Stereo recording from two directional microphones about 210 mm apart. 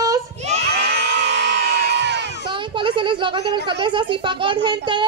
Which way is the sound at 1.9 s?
55° right (ahead or behind).